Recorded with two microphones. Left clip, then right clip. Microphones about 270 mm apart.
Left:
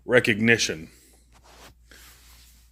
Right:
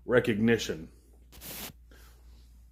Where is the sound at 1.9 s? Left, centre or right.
Left.